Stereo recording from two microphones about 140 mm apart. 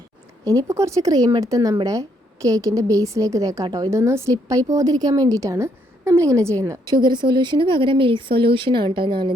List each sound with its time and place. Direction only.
0.4 s a woman's voice: 20° right (ahead or behind)
7.0 s speech: 35° right (ahead or behind)